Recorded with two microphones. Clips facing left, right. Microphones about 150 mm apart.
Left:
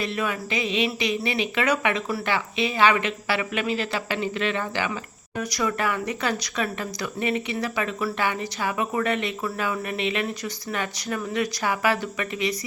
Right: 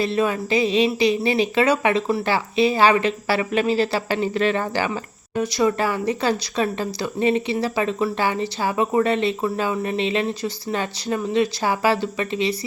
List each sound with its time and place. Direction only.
0.0 s speech: 30° right (ahead or behind)